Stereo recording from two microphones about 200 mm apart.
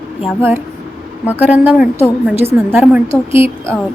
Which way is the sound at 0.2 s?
10° right (ahead or behind).